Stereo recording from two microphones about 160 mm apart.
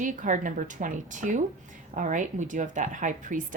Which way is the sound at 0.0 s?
55° right (ahead or behind).